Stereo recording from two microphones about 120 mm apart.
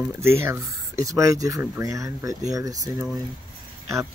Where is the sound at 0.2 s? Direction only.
20° right (ahead or behind).